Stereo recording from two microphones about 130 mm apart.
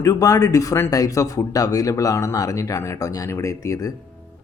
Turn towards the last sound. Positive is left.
turn(degrees=25)  # may be behind; listen again after turning